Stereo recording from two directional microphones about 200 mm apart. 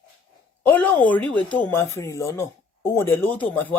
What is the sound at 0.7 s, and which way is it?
Speech, 10° left (ahead or behind).